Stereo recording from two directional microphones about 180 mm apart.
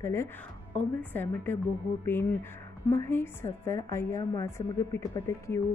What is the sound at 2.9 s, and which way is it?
A woman's voice, 15° left (ahead or behind).